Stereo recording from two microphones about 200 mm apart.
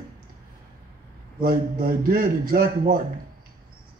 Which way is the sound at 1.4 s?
45° right (ahead or behind).